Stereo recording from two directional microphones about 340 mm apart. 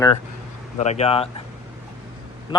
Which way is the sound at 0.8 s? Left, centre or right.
Centre.